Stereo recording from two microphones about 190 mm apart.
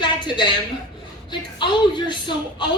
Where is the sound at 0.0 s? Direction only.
25° left (ahead or behind).